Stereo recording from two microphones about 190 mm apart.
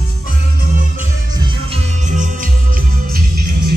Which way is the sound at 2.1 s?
40° right (ahead or behind).